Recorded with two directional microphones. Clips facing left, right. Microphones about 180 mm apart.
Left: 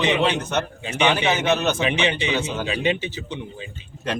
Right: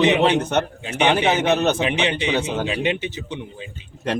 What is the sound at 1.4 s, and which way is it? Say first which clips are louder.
Speech: right 2 dB; 35° right (ahead or behind).